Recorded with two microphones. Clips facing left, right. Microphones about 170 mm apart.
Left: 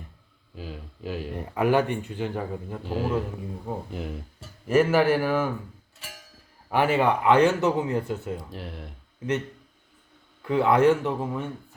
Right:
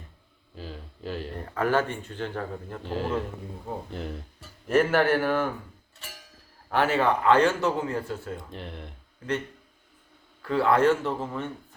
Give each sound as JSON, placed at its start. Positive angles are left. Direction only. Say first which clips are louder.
{"t": 0.5, "sound": "speech", "louder": "left 2 dB", "side_deg": 5}
{"t": 6.7, "sound": "speech", "louder": "left 1 dB", "side_deg": 10}
{"t": 8.4, "sound": "speech", "louder": "left 1 dB", "side_deg": 5}
{"t": 10.4, "sound": "speech", "louder": "left 2 dB", "side_deg": 15}